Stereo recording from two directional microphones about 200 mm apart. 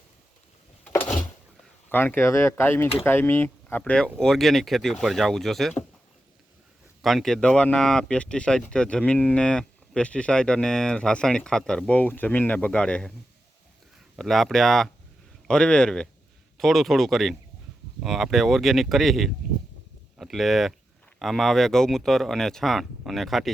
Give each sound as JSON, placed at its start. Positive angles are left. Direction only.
{"t": 1.0, "sound": "a sound", "side_deg": 20}
{"t": 1.9, "sound": "speech", "side_deg": 10}
{"t": 7.0, "sound": "speech", "side_deg": 0}
{"t": 14.2, "sound": "speech", "side_deg": 0}